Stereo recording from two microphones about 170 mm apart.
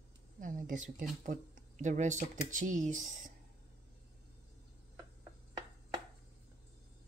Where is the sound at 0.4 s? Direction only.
50° right (ahead or behind).